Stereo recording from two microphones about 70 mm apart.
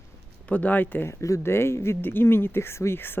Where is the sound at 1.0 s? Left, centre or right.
Left.